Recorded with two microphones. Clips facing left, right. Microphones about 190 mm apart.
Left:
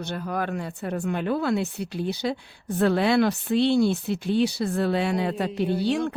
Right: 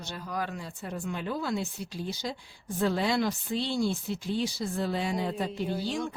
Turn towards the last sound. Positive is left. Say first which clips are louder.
# left 7 dB
turn(degrees=65)  # may be behind; listen again after turning